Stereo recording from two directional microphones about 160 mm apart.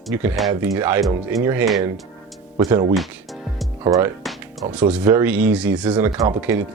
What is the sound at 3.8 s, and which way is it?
Speech, 20° right (ahead or behind).